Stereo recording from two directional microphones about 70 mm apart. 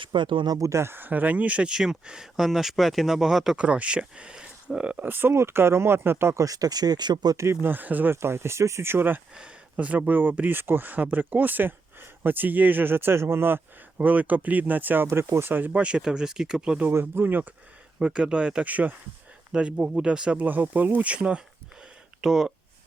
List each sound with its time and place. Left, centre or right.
0.1 s speech: right
0.6 s speech: right; by 3.6 s centre
3.6 s speech: centre
5.0 s speech: right
6.4 s speech: right
7.3 s speech: right
8.1 s speech: right
9.7 s speech: right
14.0 s speech: right
15.0 s speech: right; by 16.8 s centre
16.9 s speech: right
18.0 s speech: centre